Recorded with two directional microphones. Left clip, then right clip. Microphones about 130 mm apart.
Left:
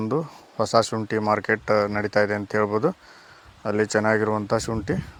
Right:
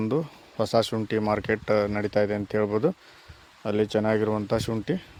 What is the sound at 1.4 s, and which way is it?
Speech, 25° right (ahead or behind).